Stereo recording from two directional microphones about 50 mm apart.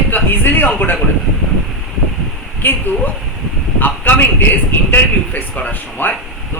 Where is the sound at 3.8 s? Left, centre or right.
Left.